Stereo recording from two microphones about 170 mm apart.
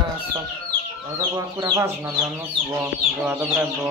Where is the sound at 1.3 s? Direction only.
20° right (ahead or behind).